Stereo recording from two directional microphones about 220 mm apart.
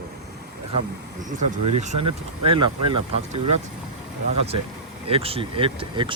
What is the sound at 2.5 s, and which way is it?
Speech, 20° right (ahead or behind).